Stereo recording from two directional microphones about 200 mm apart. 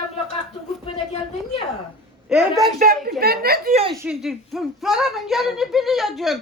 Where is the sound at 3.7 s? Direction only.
30° right (ahead or behind).